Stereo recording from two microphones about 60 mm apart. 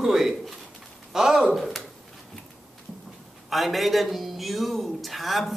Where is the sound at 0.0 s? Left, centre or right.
Centre.